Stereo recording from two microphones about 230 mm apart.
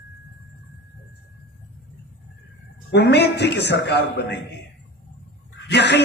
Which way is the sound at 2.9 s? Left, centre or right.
Left.